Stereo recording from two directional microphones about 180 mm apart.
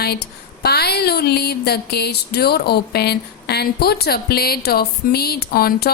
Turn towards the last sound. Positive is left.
turn(degrees=60)  # may be behind; listen again after turning